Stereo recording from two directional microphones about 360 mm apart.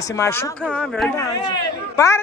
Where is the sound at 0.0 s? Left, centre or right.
Centre.